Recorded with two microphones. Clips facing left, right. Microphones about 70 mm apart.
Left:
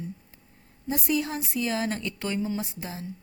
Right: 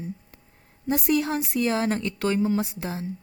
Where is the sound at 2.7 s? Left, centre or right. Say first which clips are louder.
Right 5 dB; right.